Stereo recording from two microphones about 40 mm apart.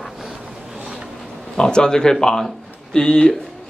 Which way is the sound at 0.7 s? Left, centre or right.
Right.